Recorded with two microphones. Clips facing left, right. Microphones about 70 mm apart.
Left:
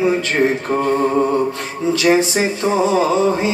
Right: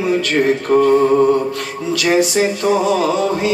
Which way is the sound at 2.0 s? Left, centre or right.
Left.